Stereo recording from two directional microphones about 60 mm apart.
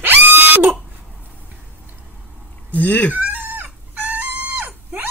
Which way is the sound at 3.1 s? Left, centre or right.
Right.